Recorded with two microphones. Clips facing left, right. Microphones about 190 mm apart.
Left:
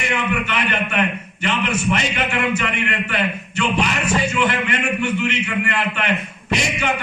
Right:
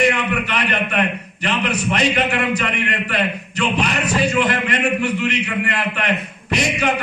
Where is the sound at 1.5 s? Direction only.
35° right (ahead or behind).